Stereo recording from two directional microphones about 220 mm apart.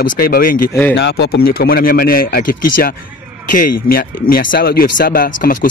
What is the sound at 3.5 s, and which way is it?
Speech, 40° left (ahead or behind).